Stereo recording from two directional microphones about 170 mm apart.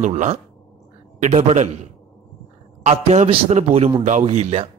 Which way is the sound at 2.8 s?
45° right (ahead or behind).